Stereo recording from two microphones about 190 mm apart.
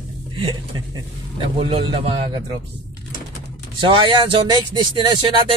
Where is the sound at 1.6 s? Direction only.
30° right (ahead or behind).